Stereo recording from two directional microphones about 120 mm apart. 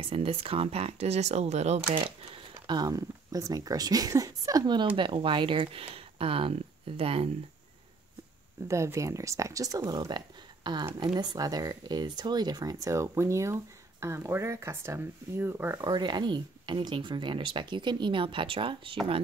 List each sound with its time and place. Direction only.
0.0 s speech: 55° right (ahead or behind)
2.0 s speech: 45° right (ahead or behind)
8.6 s speech: 25° right (ahead or behind)
15.8 s speech: 35° right (ahead or behind)